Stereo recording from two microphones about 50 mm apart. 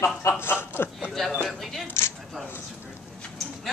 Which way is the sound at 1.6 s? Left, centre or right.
Centre.